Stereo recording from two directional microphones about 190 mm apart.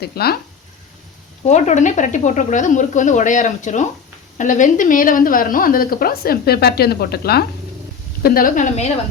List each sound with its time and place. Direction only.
0.0 s speech: 55° left (ahead or behind)
1.5 s a woman's voice: 40° left (ahead or behind)